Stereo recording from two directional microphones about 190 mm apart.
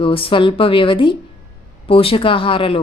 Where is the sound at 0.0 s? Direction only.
30° left (ahead or behind).